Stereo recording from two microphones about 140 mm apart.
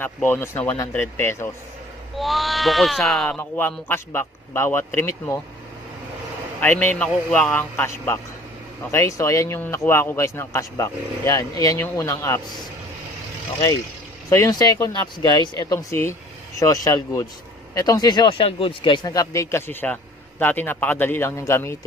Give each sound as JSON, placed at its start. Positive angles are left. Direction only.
{"t": 0.0, "sound": "a man's voice", "side_deg": 15}
{"t": 2.1, "sound": "speech", "side_deg": 0}
{"t": 3.3, "sound": "a man's voice", "side_deg": 15}
{"t": 6.6, "sound": "a man's voice", "side_deg": 15}
{"t": 14.3, "sound": "speech", "side_deg": 25}